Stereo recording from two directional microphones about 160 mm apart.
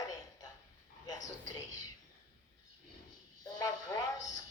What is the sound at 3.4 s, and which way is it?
A man's voice, 20° left (ahead or behind).